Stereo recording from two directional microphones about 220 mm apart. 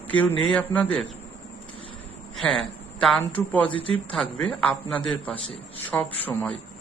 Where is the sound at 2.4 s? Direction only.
Centre (ahead or behind).